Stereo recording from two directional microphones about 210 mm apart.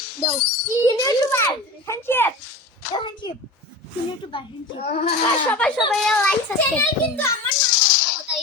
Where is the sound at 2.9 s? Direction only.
20° left (ahead or behind).